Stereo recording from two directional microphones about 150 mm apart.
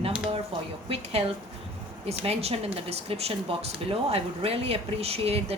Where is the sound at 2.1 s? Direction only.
45° right (ahead or behind).